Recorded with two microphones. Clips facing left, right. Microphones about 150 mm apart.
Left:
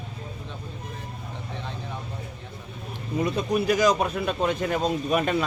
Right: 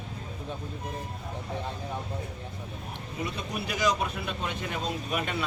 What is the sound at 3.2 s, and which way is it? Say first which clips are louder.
Speech: left 10 dB; 45° left (ahead or behind).